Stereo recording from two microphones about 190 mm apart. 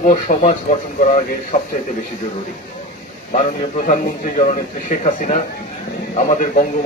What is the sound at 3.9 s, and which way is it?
A man's voice, 35° left (ahead or behind).